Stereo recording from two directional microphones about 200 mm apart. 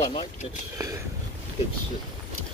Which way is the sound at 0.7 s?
15° right (ahead or behind).